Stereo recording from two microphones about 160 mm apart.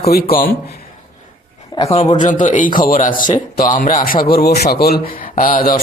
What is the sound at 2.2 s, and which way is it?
A man's voice, 50° left (ahead or behind).